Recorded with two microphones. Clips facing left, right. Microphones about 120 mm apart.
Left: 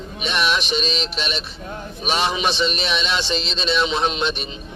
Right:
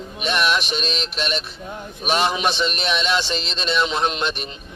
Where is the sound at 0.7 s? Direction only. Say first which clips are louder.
Left 3 dB; 45° right (ahead or behind).